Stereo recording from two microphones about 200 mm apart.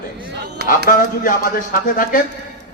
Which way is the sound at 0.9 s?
40° left (ahead or behind).